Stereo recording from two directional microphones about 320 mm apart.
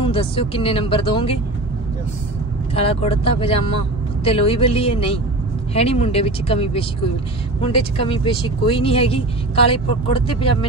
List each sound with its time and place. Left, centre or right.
0.0 s speech: centre
2.7 s speech: centre